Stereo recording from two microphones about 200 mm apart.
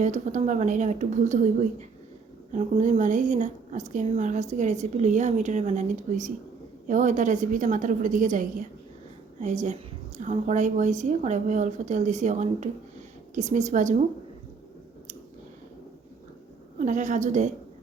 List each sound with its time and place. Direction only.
0.0 s speech: 35° right (ahead or behind)
2.5 s speech: 35° right (ahead or behind)
16.7 s speech: 40° right (ahead or behind)